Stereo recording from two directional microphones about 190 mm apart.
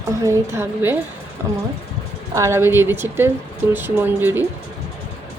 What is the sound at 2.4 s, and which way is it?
A woman's voice, 15° right (ahead or behind).